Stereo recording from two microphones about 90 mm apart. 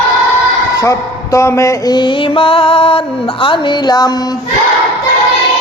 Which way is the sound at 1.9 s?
60° left (ahead or behind).